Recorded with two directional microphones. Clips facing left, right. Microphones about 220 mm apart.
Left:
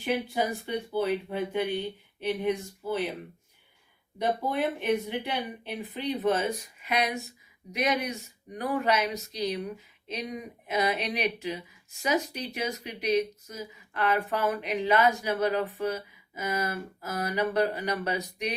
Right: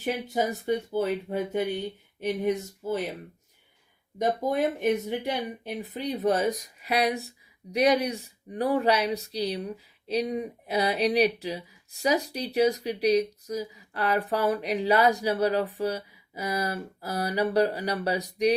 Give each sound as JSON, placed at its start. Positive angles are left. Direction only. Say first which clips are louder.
{"t": 0.0, "sound": "speech", "louder": "right 1 dB", "side_deg": -45}
{"t": 4.2, "sound": "speech", "louder": "right 3 dB", "side_deg": -45}